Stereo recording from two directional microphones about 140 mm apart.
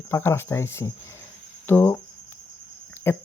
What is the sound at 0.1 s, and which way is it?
Speech, 15° left (ahead or behind).